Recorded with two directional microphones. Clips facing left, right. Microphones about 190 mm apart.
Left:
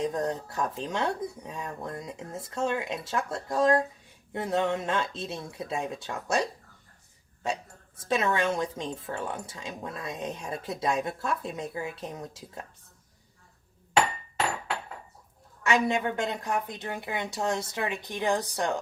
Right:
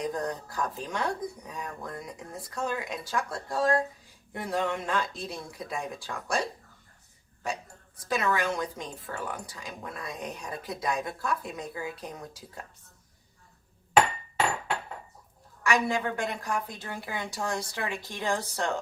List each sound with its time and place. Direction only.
0.0 s speech: 25° left (ahead or behind)
7.4 s speech: 25° left (ahead or behind)
15.6 s speech: 20° left (ahead or behind)